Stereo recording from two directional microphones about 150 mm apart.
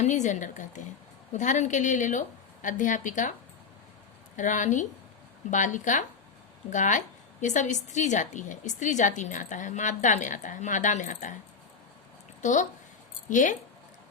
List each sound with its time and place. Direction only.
0.0 s a woman's voice: 55° left (ahead or behind)
4.4 s a woman's voice: 60° left (ahead or behind)
12.4 s a woman's voice: 55° left (ahead or behind)